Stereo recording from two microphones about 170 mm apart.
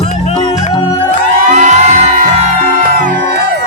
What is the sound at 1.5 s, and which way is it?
Music, 45° right (ahead or behind).